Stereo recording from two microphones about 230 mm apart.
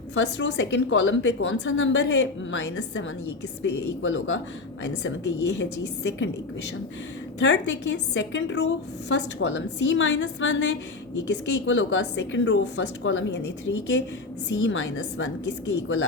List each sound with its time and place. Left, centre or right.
0.1 s a woman's voice: left
5.5 s a woman's voice: left
7.3 s a woman's voice: left